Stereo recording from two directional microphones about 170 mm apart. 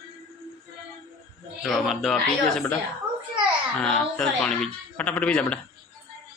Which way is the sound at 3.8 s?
5° left (ahead or behind).